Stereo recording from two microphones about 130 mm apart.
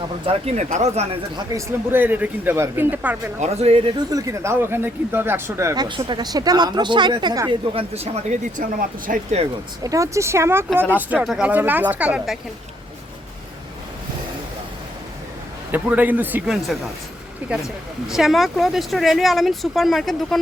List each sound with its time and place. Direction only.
0.3 s speech: 50° right (ahead or behind)
1.4 s speech: 25° right (ahead or behind)
3.4 s speech: 55° right (ahead or behind)
4.1 s speech: 20° right (ahead or behind)
5.7 s speech: 30° right (ahead or behind)
7.7 s speech: 50° right (ahead or behind); by 9.2 s 90° right
9.8 s speech: 25° right (ahead or behind)
11.2 s speech: 5° right (ahead or behind)
15.7 s speech: 15° right (ahead or behind)